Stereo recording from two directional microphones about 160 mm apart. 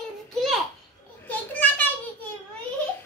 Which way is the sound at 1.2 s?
10° left (ahead or behind).